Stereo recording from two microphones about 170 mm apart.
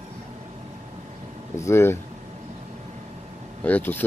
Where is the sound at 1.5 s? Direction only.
15° left (ahead or behind).